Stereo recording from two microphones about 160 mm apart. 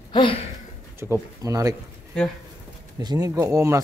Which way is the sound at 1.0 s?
20° right (ahead or behind).